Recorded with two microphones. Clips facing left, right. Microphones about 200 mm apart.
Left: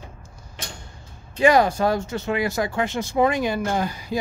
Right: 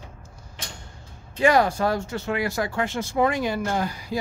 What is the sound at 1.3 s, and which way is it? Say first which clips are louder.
Speech: left 2 dB; 15° left (ahead or behind).